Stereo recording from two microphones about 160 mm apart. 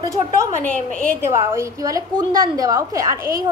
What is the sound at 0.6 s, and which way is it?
Speech, 10° left (ahead or behind).